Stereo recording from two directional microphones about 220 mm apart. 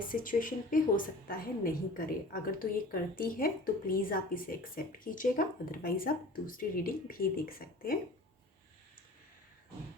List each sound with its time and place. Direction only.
0.1 s a woman's voice: 40° left (ahead or behind)